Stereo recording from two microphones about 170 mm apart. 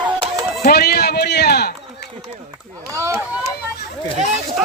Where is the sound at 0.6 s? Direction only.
65° left (ahead or behind).